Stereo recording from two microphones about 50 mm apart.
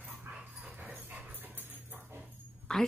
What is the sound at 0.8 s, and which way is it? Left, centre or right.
Dog, right.